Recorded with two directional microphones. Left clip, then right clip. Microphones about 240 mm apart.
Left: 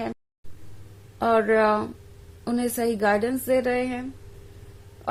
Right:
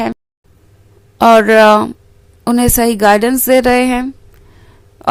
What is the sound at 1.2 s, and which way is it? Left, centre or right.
A woman's voice, right.